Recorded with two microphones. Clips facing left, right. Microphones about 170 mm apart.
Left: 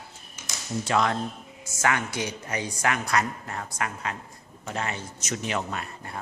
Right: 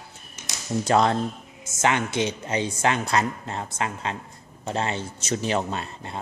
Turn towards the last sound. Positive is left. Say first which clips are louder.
# right 3 dB
turn(degrees=-25)  # may be behind; listen again after turning